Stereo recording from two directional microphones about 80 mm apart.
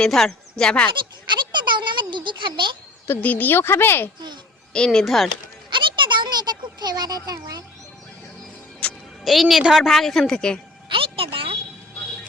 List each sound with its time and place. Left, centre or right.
0.0 s a woman's voice: centre
0.9 s a sound: right
3.2 s a woman's voice: left
4.7 s speech: centre
5.7 s a sound: right
8.8 s music: centre
9.2 s a woman's voice: centre
10.8 s music: right